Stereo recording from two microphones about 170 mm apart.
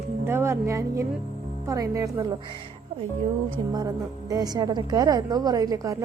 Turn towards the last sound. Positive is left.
turn(degrees=-20)  # may be behind; listen again after turning